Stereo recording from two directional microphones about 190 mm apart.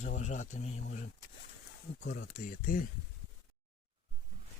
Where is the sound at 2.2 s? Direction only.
45° left (ahead or behind).